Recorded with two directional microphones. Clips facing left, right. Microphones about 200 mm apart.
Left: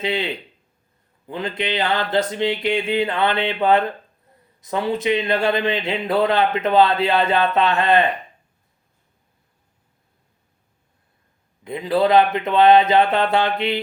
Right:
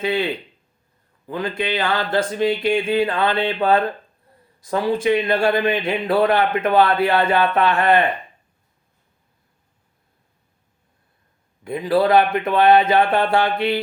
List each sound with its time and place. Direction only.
0.0 s speech: 25° left (ahead or behind)
11.6 s speech: 25° left (ahead or behind)